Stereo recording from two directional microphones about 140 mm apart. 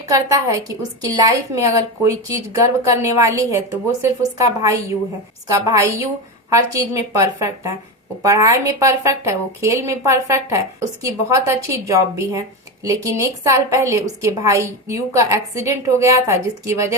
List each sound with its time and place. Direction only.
0.1 s a woman's voice: 20° right (ahead or behind)
7.1 s a woman's voice: 20° right (ahead or behind)